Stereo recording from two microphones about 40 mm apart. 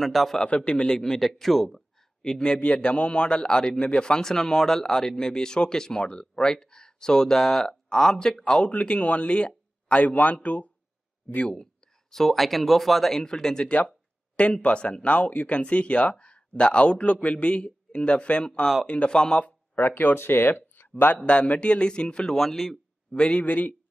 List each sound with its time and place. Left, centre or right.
0.0 s speech: centre
0.4 s speech: left
0.9 s speech: centre
2.2 s speech: centre; by 10.7 s left
12.1 s speech: centre
13.1 s speech: centre
13.7 s speech: left
19.7 s speech: left
20.2 s speech: left
21.5 s speech: left
22.3 s speech: centre
23.1 s speech: left
23.4 s speech: left